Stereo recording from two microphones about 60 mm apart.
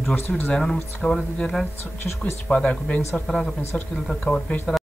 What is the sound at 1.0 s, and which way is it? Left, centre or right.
Speech, centre.